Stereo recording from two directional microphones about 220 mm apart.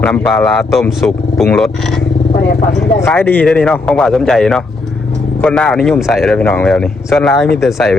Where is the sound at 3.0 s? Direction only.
10° left (ahead or behind).